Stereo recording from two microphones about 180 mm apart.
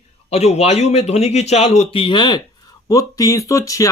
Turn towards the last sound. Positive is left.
turn(degrees=20)  # may be behind; listen again after turning